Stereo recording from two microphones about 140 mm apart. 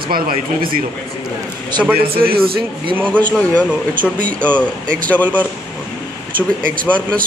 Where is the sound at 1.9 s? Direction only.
90° right.